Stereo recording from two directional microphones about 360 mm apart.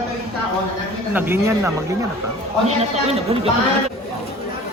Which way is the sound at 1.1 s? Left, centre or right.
Centre.